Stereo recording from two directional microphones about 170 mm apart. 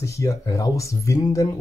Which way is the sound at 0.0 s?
15° left (ahead or behind).